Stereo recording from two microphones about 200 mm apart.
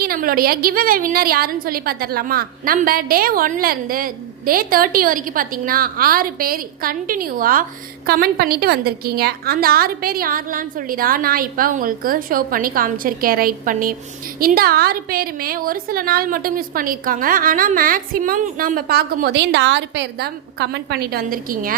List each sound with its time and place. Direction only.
0.0 s a woman's voice: 45° right (ahead or behind)